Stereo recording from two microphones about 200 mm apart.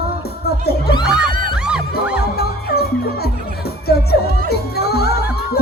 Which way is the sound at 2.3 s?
50° left (ahead or behind).